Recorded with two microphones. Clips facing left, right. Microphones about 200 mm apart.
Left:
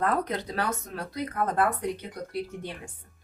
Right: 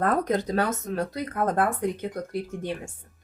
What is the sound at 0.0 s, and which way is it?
Speech, 45° right (ahead or behind).